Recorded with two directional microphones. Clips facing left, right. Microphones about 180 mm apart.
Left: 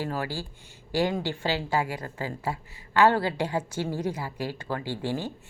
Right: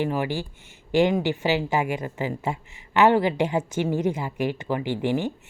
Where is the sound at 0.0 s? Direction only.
20° right (ahead or behind).